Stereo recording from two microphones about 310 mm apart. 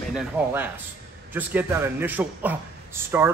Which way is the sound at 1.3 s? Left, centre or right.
Centre.